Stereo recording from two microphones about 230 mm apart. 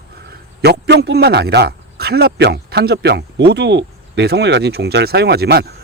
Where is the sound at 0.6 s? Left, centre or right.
Right.